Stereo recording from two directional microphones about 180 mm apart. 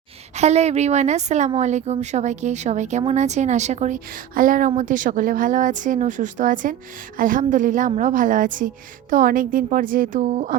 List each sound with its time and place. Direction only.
0.3 s a woman's voice: 35° right (ahead or behind)